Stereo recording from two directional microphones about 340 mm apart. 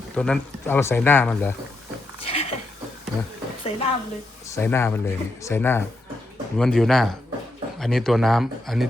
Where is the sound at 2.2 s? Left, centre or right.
Centre.